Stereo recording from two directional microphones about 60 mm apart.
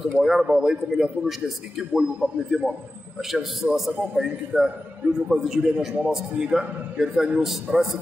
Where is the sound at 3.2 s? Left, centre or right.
Centre.